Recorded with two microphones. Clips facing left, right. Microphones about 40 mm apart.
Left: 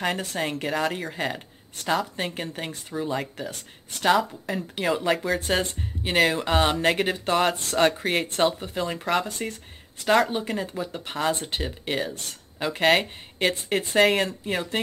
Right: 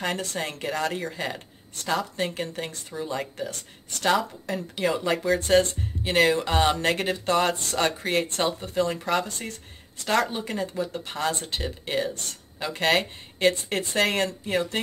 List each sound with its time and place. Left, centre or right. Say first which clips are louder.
0.2 s speech: left 2 dB; centre